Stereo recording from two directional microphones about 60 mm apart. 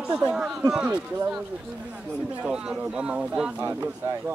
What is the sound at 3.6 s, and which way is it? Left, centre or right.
Speech, right.